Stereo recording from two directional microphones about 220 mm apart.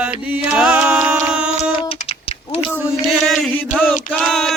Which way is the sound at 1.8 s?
25° left (ahead or behind).